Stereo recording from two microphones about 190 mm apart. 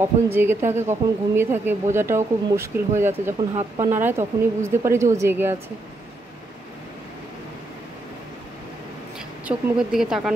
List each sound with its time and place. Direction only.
0.0 s speech: 10° right (ahead or behind)
3.3 s speech: 25° right (ahead or behind)
3.9 s speech: 10° right (ahead or behind)
9.5 s speech: 5° right (ahead or behind)